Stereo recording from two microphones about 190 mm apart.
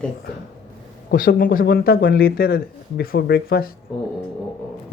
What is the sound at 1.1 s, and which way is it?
Speech, 50° left (ahead or behind).